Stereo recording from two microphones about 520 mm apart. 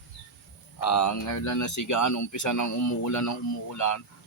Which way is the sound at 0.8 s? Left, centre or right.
Left.